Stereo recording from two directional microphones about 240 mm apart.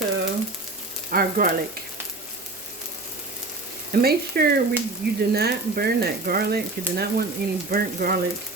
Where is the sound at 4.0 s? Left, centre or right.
Right.